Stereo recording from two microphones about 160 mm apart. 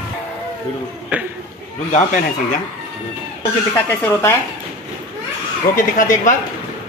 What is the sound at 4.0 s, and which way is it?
Speech, 15° left (ahead or behind).